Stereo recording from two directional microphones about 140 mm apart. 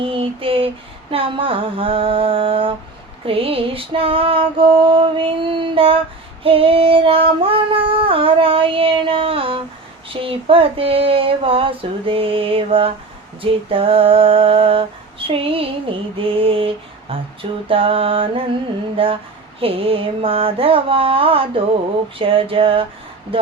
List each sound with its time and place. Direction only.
0.0 s female singing: 40° right (ahead or behind)